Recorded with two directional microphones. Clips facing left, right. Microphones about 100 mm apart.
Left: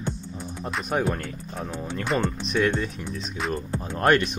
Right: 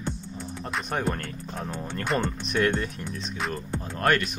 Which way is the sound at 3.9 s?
20° left (ahead or behind).